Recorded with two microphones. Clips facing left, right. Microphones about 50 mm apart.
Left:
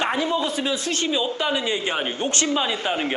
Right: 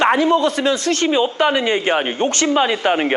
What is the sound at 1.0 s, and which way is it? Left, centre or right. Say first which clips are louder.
A woman's voice: right 8 dB; right.